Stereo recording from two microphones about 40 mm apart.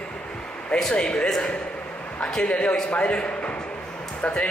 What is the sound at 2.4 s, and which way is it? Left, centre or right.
Speech, left.